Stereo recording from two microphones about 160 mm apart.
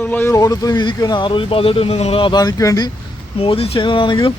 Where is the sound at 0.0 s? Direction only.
10° left (ahead or behind).